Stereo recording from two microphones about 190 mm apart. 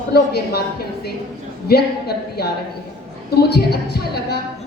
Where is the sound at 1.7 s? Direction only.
55° left (ahead or behind).